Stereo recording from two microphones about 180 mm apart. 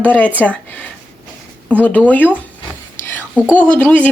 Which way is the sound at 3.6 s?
10° left (ahead or behind).